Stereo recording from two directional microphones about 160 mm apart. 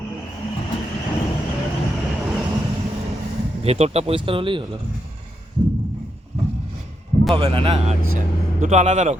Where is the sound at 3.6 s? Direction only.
40° right (ahead or behind).